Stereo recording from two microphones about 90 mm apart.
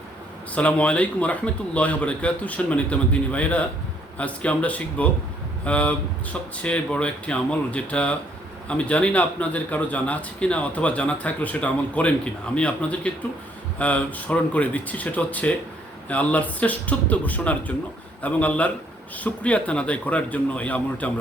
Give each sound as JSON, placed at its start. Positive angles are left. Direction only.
{"t": 0.5, "sound": "a man's voice", "side_deg": 15}